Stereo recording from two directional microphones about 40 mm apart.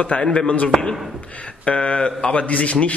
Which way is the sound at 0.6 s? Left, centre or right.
Centre.